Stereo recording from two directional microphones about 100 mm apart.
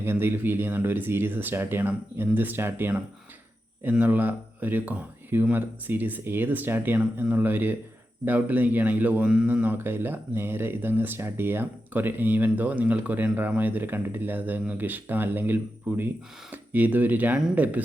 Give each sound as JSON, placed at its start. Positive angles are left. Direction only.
{"t": 0.0, "sound": "a man's voice", "side_deg": -25}